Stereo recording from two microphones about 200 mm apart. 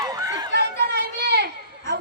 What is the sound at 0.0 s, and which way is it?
Chatter, 15° right (ahead or behind).